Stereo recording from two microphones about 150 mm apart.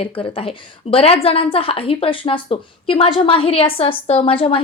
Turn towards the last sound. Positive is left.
turn(degrees=35)  # may be behind; listen again after turning